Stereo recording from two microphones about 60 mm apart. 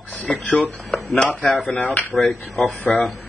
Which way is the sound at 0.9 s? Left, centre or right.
Centre.